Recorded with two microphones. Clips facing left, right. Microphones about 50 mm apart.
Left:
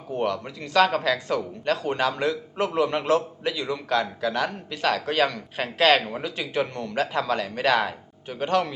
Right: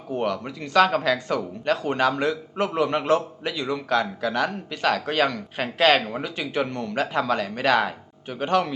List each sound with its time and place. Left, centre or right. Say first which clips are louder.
0.1 s speech: right 1 dB; centre